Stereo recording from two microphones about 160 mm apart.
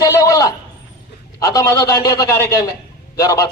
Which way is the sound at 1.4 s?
25° left (ahead or behind).